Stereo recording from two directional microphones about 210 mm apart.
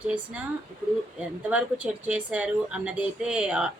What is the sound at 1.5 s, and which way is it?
A woman's voice, 5° right (ahead or behind).